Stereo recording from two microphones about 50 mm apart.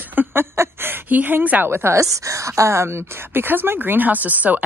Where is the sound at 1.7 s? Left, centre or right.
Right.